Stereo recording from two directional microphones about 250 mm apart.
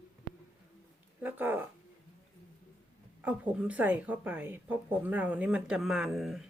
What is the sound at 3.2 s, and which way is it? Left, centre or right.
A woman's voice, centre.